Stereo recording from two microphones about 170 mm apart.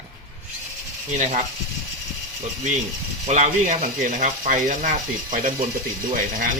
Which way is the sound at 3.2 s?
45° right (ahead or behind).